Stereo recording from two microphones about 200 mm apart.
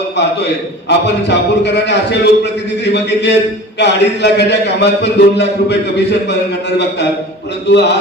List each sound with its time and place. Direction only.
0.2 s a man's voice: 60° left (ahead or behind)
7.7 s a man's voice: 60° left (ahead or behind)